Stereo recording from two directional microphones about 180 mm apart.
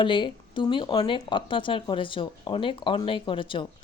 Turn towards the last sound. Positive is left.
turn(degrees=30)  # may be behind; listen again after turning